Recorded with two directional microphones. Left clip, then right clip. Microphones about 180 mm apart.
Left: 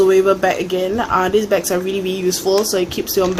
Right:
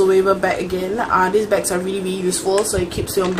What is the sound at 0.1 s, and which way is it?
A woman's voice, 50° left (ahead or behind).